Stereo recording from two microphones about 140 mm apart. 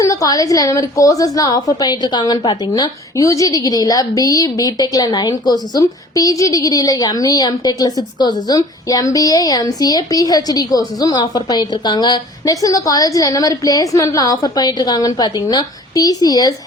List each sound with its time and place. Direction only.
0.0 s a woman's voice: 25° left (ahead or behind)